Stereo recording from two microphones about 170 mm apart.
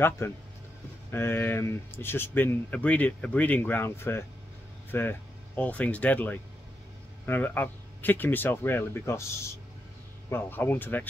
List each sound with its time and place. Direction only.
0.2 s speech: 15° left (ahead or behind)